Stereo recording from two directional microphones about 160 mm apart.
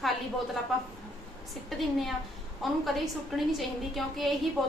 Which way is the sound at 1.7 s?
Centre (ahead or behind).